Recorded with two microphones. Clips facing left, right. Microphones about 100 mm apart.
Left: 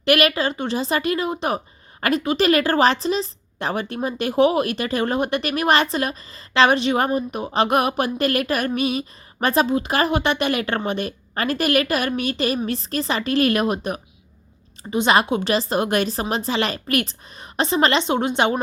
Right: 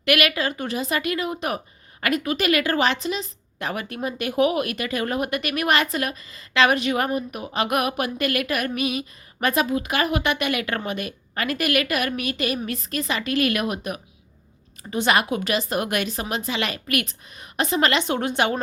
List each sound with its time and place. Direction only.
0.0 s a woman's voice: 30° left (ahead or behind)
14.8 s a woman's voice: 20° left (ahead or behind)